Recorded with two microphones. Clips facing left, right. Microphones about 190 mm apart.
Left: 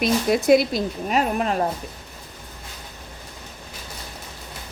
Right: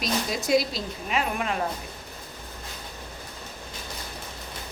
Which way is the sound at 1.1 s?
40° left (ahead or behind).